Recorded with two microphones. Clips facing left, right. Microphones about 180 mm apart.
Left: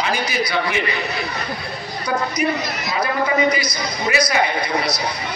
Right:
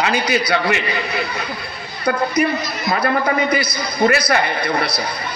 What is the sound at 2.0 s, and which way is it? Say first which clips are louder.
A man's voice: right 4 dB; 55° right (ahead or behind).